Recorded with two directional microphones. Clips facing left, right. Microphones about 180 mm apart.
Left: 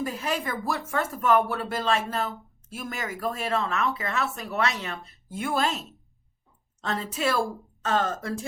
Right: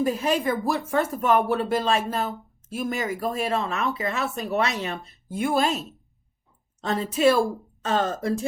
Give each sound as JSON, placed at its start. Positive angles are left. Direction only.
{"t": 0.0, "sound": "speech", "side_deg": -20}
{"t": 6.8, "sound": "speech", "side_deg": -15}